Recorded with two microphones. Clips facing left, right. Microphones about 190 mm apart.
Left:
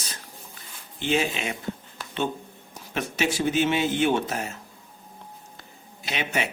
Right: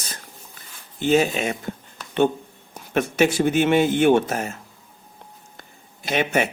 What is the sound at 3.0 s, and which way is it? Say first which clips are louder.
A man's voice: right 7 dB; 50° right (ahead or behind).